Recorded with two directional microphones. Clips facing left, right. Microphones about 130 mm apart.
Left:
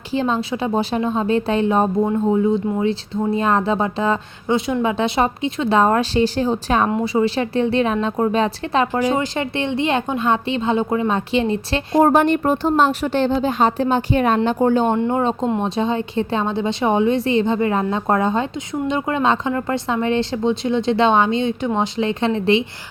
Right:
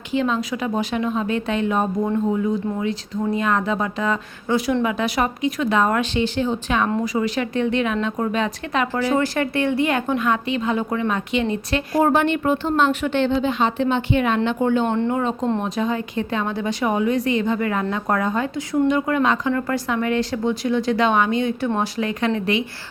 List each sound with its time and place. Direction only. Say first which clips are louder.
0.1 s speech: left 1 dB; 30° left (ahead or behind)
8.9 s speech: left 1 dB; 15° left (ahead or behind)
12.1 s speech: left 3 dB; 40° left (ahead or behind)